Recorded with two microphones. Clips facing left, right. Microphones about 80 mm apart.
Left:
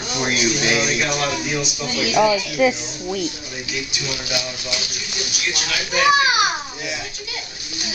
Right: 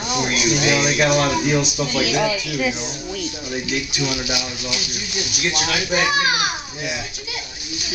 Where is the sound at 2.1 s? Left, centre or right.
Centre.